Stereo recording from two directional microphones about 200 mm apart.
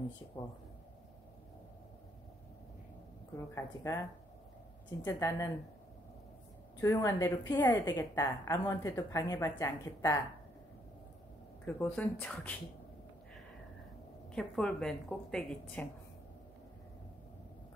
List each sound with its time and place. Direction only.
3.5 s speech: 15° left (ahead or behind)
5.0 s speech: 15° left (ahead or behind)
6.8 s speech: 15° left (ahead or behind)
11.6 s speech: 5° left (ahead or behind)
14.3 s a woman's voice: 5° left (ahead or behind)